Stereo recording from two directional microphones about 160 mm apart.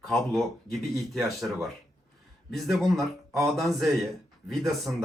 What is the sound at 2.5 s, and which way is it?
Speech, centre (ahead or behind).